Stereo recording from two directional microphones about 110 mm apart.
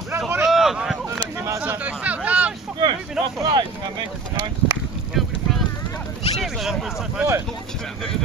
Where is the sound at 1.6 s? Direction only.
15° right (ahead or behind).